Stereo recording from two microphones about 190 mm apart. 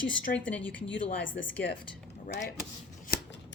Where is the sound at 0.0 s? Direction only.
5° left (ahead or behind).